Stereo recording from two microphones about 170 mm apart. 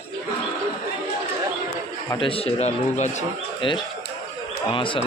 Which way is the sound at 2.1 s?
30° left (ahead or behind).